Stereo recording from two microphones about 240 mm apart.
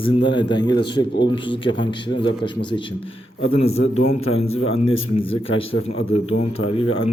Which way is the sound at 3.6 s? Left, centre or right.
Left.